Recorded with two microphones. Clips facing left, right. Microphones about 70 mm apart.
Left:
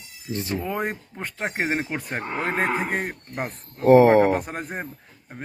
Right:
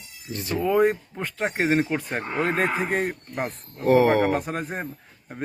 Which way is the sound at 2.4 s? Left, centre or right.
Left.